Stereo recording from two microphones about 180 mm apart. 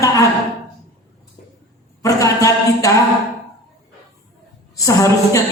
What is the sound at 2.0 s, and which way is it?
Speech, 20° left (ahead or behind).